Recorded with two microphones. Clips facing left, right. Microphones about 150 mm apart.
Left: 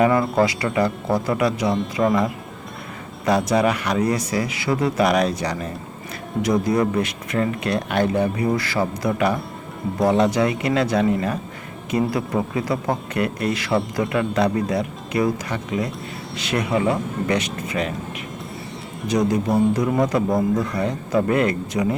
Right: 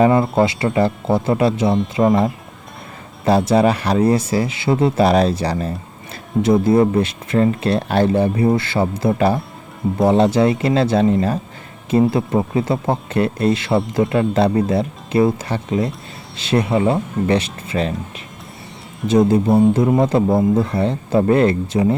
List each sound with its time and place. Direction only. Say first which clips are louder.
0.0 s speech: right 3 dB; 25° right (ahead or behind)
19.0 s speech: right 6 dB; 30° right (ahead or behind)